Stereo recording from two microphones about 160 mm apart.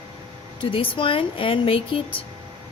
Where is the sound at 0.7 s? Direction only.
35° left (ahead or behind).